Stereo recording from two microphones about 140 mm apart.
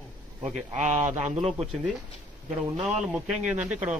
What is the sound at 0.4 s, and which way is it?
Speech, 60° right (ahead or behind).